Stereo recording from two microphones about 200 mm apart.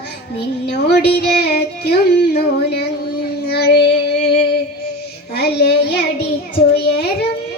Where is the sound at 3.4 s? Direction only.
55° left (ahead or behind).